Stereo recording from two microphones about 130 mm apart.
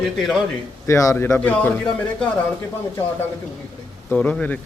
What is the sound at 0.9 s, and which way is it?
A man's voice, 25° left (ahead or behind).